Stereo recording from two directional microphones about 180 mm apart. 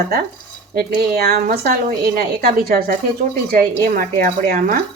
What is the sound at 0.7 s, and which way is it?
Speech, 55° right (ahead or behind).